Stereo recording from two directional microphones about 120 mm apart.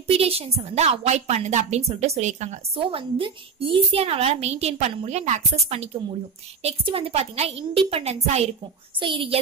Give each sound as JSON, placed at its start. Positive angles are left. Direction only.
{"t": 0.0, "sound": "a woman's voice", "side_deg": -55}
{"t": 2.8, "sound": "a woman's voice", "side_deg": -45}
{"t": 5.5, "sound": "a woman's voice", "side_deg": -60}
{"t": 6.6, "sound": "a woman's voice", "side_deg": -50}
{"t": 9.0, "sound": "speech", "side_deg": -45}